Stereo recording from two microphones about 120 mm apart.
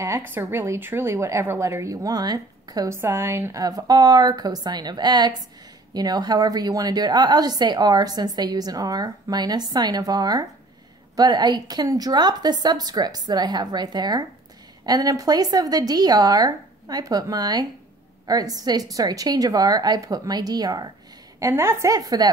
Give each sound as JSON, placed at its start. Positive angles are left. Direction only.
{"t": 0.3, "sound": "a woman's voice", "side_deg": -20}
{"t": 2.9, "sound": "a woman's voice", "side_deg": -20}
{"t": 21.4, "sound": "a woman's voice", "side_deg": -20}